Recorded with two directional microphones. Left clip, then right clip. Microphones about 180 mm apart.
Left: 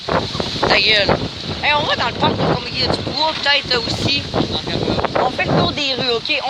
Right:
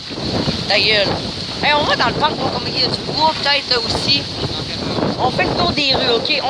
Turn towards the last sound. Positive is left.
turn(degrees=-10)  # may be behind; listen again after turning